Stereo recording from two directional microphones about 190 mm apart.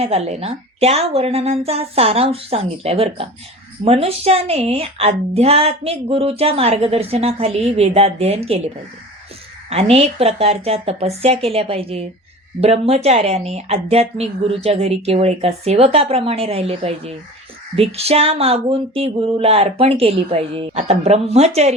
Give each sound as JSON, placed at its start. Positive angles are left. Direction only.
{"t": 0.0, "sound": "a woman's voice", "side_deg": -35}